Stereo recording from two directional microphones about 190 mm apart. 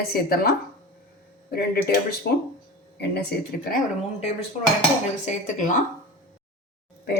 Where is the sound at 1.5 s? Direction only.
55° left (ahead or behind).